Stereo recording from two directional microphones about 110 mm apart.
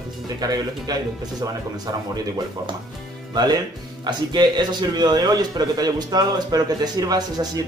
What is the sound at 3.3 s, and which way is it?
A man's voice, 35° right (ahead or behind).